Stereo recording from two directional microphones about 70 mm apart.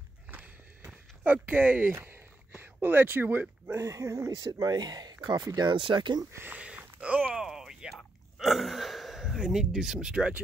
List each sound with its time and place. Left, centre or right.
0.3 s walk: right
2.5 s speech: right
3.7 s speech: right
4.4 s speech: right
6.3 s speech: right
6.6 s a sound: centre
7.4 s a sound: centre